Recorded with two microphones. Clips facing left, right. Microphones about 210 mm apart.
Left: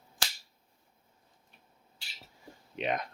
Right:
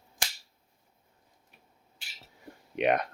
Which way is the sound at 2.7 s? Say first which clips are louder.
Right 7 dB; 65° right (ahead or behind).